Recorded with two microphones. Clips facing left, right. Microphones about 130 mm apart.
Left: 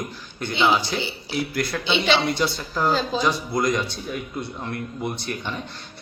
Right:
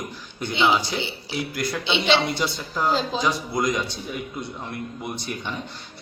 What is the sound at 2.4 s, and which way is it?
Speech, 5° left (ahead or behind).